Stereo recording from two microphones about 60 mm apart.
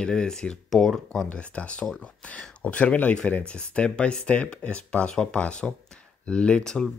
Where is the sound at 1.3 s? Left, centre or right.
Left.